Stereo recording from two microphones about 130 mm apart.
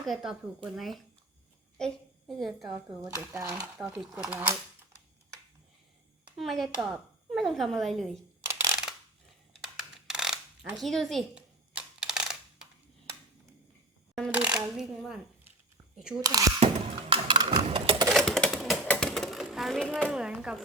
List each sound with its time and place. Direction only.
0.0 s a woman's voice: 5° right (ahead or behind)
2.7 s speech: 25° right (ahead or behind)
3.8 s a woman's voice: 5° right (ahead or behind)
6.2 s speech: centre (ahead or behind)
9.7 s a sound: 5° right (ahead or behind)
14.3 s a woman's voice: 10° right (ahead or behind)
16.2 s speech: 25° right (ahead or behind)
16.6 s a sound: 45° right (ahead or behind)
18.1 s typewriter: centre (ahead or behind)
20.1 s a woman's voice: 5° right (ahead or behind)